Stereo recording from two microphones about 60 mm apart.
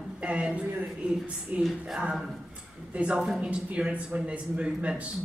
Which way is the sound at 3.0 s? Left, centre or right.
Centre.